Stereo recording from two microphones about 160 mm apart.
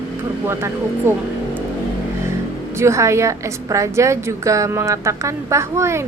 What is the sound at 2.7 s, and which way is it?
A woman's voice, 15° right (ahead or behind).